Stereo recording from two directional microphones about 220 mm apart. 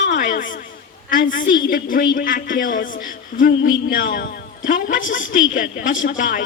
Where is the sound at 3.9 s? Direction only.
40° left (ahead or behind).